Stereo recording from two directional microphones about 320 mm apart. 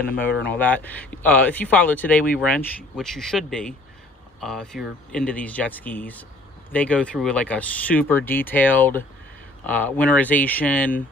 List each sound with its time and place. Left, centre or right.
0.0 s speech: left
0.5 s speech: centre